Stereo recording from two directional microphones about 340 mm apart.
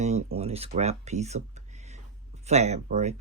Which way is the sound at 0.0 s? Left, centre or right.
Centre.